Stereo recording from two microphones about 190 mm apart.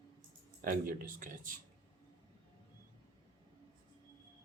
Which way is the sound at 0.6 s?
45° right (ahead or behind).